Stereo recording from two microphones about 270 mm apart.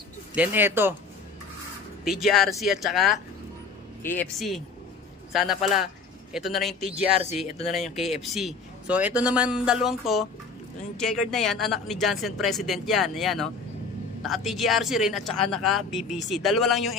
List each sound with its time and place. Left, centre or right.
0.3 s speech: centre
2.0 s a woman's voice: centre
7.4 s speech: left
7.7 s a woman's voice: centre